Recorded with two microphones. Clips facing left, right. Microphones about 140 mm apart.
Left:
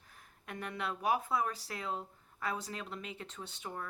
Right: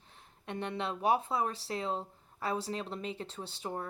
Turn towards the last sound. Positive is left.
turn(degrees=-30)  # may be behind; listen again after turning